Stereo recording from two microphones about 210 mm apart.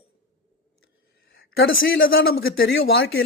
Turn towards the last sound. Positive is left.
turn(degrees=50)  # may be behind; listen again after turning